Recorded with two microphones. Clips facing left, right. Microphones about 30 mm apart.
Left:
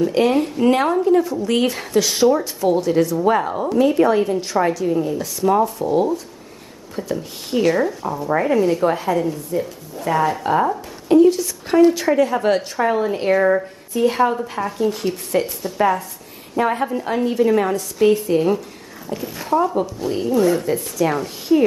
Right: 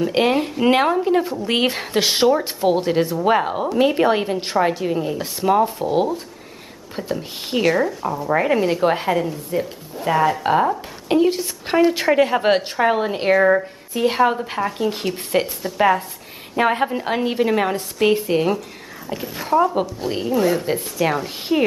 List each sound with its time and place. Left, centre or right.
0.1 s a woman's voice: right
7.6 s speech: centre
8.4 s a woman's voice: right
11.1 s a woman's voice: right
13.3 s speech: centre
14.0 s a woman's voice: right
19.3 s speech: centre
20.3 s speech: centre; by 21.7 s right